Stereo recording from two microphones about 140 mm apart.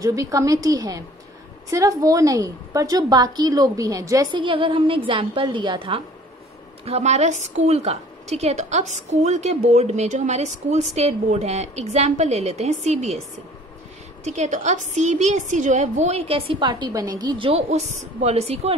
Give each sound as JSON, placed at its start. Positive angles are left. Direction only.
{"t": 0.0, "sound": "a woman's voice", "side_deg": -25}
{"t": 4.3, "sound": "a woman's voice", "side_deg": -35}
{"t": 6.8, "sound": "a woman's voice", "side_deg": -50}
{"t": 14.2, "sound": "a woman's voice", "side_deg": -55}